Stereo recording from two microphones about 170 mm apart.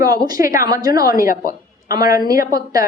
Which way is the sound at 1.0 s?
55° left (ahead or behind).